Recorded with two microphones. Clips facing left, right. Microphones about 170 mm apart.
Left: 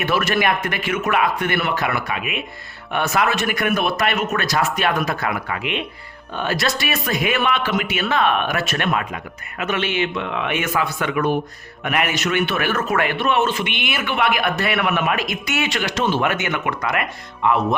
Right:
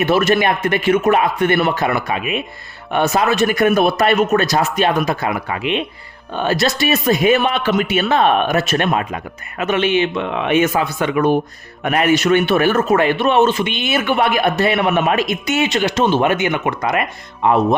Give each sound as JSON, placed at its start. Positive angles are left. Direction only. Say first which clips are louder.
{"t": 0.0, "sound": "a man's voice", "louder": "right 5 dB", "side_deg": -25}